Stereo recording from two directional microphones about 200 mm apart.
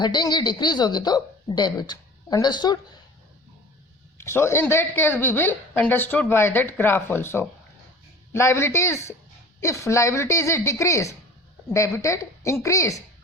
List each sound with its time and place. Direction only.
0.0 s speech: 20° left (ahead or behind)
4.2 s a woman's voice: 15° left (ahead or behind)